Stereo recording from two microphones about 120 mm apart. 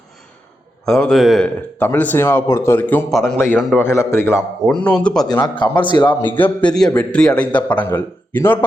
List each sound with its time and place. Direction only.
0.9 s a man's voice: 5° left (ahead or behind)
1.8 s a man's voice: 15° left (ahead or behind)
3.1 s a man's voice: centre (ahead or behind)
3.8 s speech: 20° left (ahead or behind)
4.4 s a man's voice: centre (ahead or behind)
4.8 s a man's voice: 10° left (ahead or behind)
5.3 s a man's voice: 35° left (ahead or behind)
6.1 s a man's voice: 15° left (ahead or behind)